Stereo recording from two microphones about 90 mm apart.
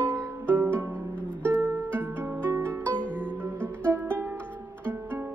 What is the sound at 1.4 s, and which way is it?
Music, 25° right (ahead or behind).